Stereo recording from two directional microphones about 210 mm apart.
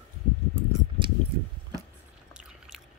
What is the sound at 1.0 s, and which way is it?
Keys jangling, 25° right (ahead or behind).